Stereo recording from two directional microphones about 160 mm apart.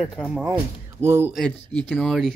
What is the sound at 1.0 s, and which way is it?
Speech, 15° right (ahead or behind).